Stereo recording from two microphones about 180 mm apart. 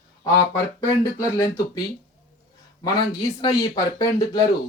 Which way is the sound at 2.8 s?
25° left (ahead or behind).